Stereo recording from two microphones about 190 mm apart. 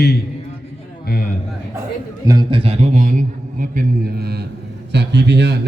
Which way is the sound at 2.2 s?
20° right (ahead or behind).